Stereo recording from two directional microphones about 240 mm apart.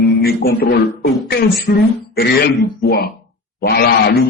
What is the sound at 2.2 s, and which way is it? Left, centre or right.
A man's voice, left.